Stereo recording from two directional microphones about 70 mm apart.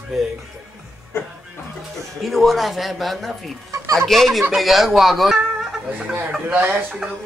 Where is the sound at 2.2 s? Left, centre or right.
Centre.